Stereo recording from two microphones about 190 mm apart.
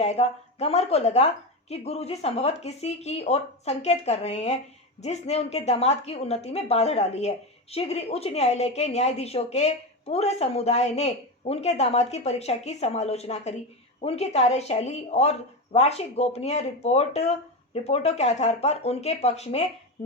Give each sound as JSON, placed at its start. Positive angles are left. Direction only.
{"t": 0.0, "sound": "a woman's voice", "side_deg": 35}